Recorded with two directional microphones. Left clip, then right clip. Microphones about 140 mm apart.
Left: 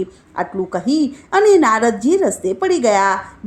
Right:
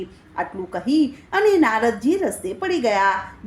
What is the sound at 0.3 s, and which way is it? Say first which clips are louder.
A woman's voice: left 5 dB; 45° left (ahead or behind).